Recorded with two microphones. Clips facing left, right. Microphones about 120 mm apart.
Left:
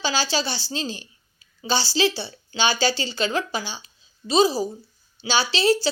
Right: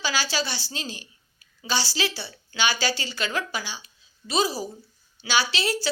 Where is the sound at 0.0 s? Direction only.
25° left (ahead or behind).